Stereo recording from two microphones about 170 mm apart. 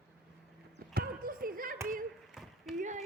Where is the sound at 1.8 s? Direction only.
55° right (ahead or behind).